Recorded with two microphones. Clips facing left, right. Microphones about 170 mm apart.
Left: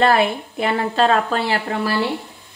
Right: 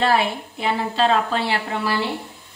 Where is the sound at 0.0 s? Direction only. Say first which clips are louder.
Left 3 dB; 55° left (ahead or behind).